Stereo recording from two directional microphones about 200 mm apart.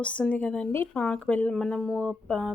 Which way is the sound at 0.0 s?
5° left (ahead or behind).